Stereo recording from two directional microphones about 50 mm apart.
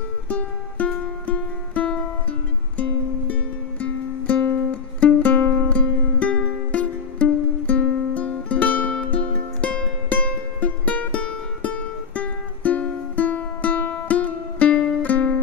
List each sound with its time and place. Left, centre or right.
0.3 s music: left
3.8 s music: left